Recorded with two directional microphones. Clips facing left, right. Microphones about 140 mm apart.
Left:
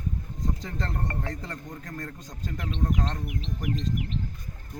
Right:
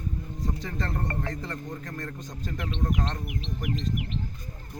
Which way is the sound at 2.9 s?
5° right (ahead or behind).